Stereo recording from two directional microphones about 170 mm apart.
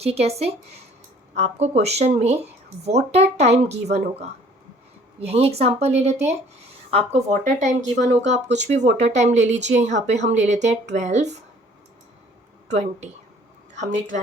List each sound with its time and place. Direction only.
0.0 s speech: 35° right (ahead or behind)
12.7 s speech: 40° right (ahead or behind)